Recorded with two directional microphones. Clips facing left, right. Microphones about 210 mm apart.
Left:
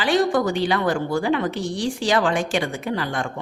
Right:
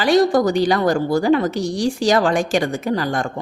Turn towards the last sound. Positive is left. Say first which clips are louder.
# right 5 dB
turn(degrees=-40)  # may be behind; listen again after turning